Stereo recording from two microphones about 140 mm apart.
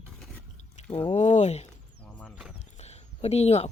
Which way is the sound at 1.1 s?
55° left (ahead or behind).